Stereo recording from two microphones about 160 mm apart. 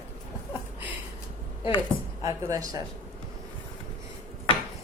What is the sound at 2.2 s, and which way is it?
Speech, 20° right (ahead or behind).